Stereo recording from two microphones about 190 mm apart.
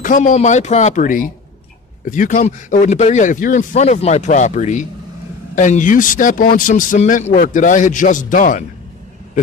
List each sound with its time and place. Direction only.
0.0 s a man's voice: 40° left (ahead or behind)